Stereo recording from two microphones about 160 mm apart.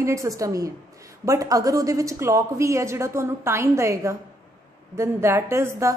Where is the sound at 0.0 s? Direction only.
20° right (ahead or behind).